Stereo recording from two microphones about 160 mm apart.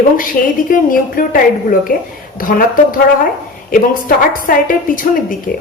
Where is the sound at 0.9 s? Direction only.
60° left (ahead or behind).